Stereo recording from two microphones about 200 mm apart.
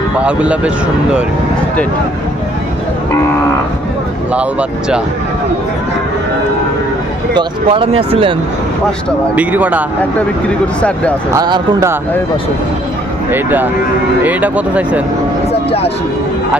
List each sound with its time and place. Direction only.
0.2 s speech: 5° right (ahead or behind)
7.3 s speech: 25° right (ahead or behind)
9.3 s speech: 5° right (ahead or behind)
10.8 s speech: 5° left (ahead or behind)
11.3 s speech: 20° right (ahead or behind)
13.3 s speech: 10° right (ahead or behind)